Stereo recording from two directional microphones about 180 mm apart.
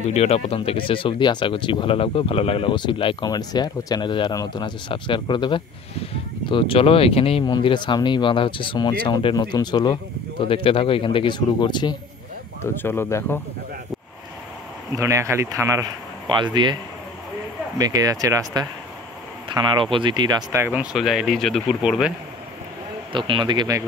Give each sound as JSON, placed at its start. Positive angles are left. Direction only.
{"t": 0.1, "sound": "speech", "side_deg": 35}
{"t": 12.7, "sound": "speech", "side_deg": 15}
{"t": 15.0, "sound": "speech", "side_deg": -15}
{"t": 17.7, "sound": "speech", "side_deg": -20}
{"t": 19.5, "sound": "speech", "side_deg": -25}
{"t": 23.1, "sound": "speech", "side_deg": -25}